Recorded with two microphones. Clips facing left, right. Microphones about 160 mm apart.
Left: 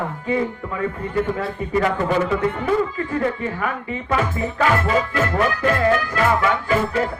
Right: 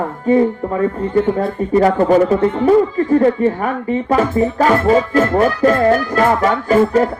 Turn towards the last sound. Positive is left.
turn(degrees=-40)  # may be behind; listen again after turning